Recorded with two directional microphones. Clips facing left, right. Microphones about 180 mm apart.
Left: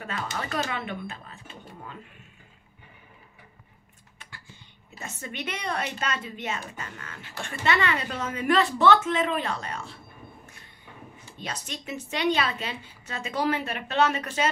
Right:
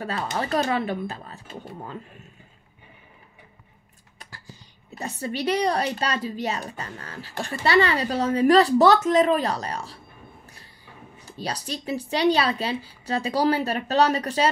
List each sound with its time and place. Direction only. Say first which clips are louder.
0.0 s speech: right 5 dB; 35° right (ahead or behind)
4.2 s speech: right 4 dB; 40° right (ahead or behind)
11.3 s speech: right 6 dB; 35° right (ahead or behind)